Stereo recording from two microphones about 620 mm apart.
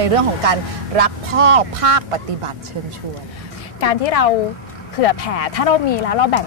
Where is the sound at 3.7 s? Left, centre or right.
Left.